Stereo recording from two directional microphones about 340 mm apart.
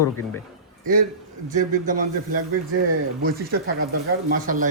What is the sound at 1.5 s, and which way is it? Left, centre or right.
Speech, right.